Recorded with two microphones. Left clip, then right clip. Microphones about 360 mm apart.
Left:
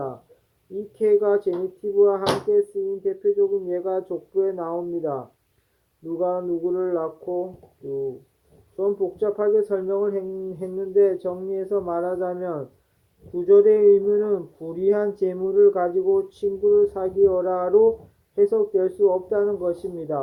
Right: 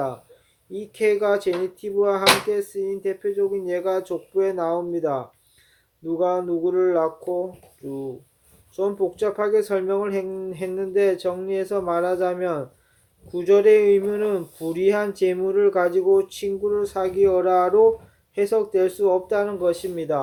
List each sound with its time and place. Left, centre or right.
0.9 s speech: right
6.1 s a sound: right
8.8 s speech: right